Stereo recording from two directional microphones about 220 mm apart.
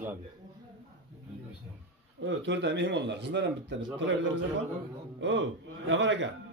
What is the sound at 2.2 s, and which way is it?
A man's voice, 55° right (ahead or behind).